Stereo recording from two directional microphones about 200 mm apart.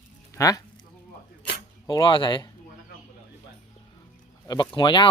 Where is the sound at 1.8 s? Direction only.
25° left (ahead or behind).